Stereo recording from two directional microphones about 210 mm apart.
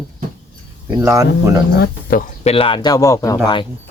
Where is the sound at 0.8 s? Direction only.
15° right (ahead or behind).